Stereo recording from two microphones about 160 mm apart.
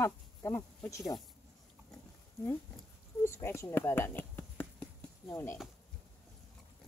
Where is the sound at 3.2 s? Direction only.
15° left (ahead or behind).